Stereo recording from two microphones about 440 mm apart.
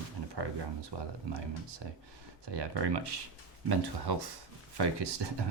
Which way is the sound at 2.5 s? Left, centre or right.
Right.